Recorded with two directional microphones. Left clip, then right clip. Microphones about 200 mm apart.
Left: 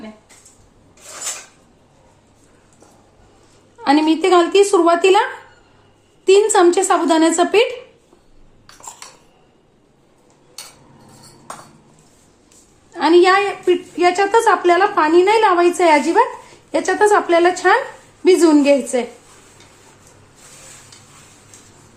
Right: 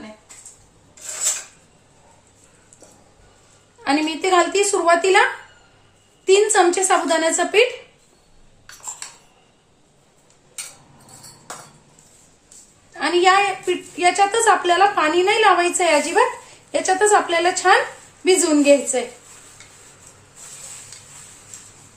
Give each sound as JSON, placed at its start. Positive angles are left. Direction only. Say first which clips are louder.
{"t": 3.8, "sound": "a woman's voice", "louder": "left 5 dB", "side_deg": 40}
{"t": 6.2, "sound": "a woman's voice", "louder": "left 3 dB", "side_deg": 40}
{"t": 12.9, "sound": "a woman's voice", "louder": "left 4 dB", "side_deg": 40}